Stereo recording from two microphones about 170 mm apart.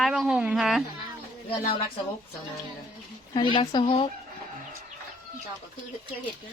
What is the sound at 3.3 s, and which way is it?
Speech, 30° left (ahead or behind).